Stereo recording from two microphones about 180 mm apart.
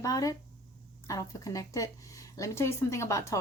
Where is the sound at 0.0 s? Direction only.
20° left (ahead or behind).